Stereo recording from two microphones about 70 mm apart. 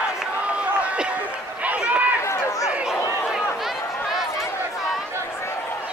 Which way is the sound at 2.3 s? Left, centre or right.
Left.